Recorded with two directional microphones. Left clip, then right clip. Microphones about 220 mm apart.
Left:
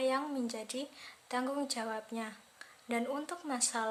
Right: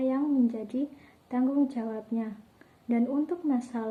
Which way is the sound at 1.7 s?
45° left (ahead or behind).